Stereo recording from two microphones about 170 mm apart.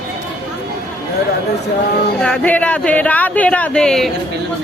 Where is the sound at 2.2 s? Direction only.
5° left (ahead or behind).